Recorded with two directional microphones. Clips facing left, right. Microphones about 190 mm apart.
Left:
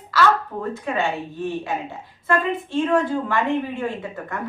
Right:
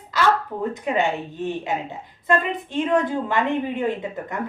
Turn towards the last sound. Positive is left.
turn(degrees=-20)  # may be behind; listen again after turning